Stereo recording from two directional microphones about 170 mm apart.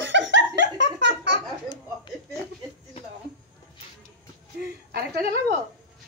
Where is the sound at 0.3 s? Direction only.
90° right.